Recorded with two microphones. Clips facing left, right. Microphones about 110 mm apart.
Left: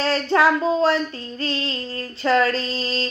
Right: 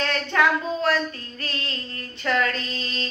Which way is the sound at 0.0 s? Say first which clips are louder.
Left 4 dB; 30° left (ahead or behind).